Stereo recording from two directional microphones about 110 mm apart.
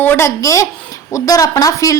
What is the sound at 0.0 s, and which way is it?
A child's voice, 20° left (ahead or behind).